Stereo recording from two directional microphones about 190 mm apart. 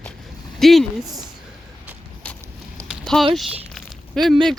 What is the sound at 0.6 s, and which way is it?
Speech, centre (ahead or behind).